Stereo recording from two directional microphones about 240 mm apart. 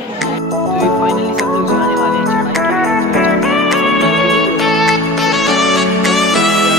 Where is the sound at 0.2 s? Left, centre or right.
Centre.